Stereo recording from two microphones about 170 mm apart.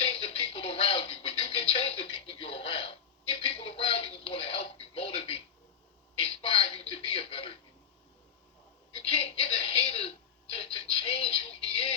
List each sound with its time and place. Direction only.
0.0 s music: 35° left (ahead or behind)
6.1 s television: 35° left (ahead or behind)
9.1 s television: 35° left (ahead or behind)